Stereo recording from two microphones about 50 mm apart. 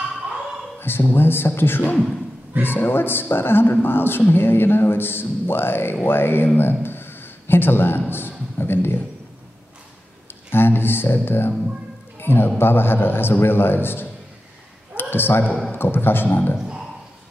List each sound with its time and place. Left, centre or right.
0.7 s a sound: left
1.1 s a man's voice: left
10.5 s speech: left
12.2 s music: left
12.5 s a man's voice: left